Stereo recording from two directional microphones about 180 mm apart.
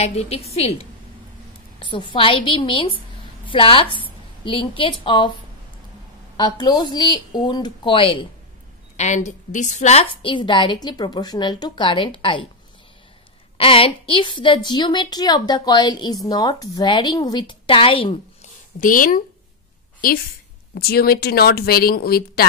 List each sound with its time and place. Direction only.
0.0 s a woman's voice: 35° left (ahead or behind)
1.8 s a woman's voice: 25° left (ahead or behind)
8.9 s a woman's voice: 40° left (ahead or behind)
10.2 s a woman's voice: 25° left (ahead or behind)
13.6 s a woman's voice: 30° left (ahead or behind)
18.8 s speech: 50° left (ahead or behind)
20.7 s speech: 60° left (ahead or behind)